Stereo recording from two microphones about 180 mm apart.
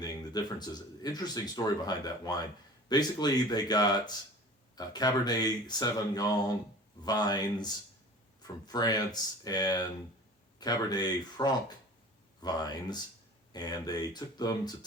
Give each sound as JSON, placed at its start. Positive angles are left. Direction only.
{"t": 0.0, "sound": "speech", "side_deg": 20}